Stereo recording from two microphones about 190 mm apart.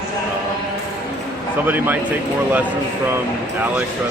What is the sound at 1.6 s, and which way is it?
Speech, 10° right (ahead or behind).